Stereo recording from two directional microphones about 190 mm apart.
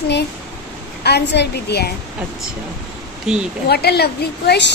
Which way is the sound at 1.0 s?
60° left (ahead or behind).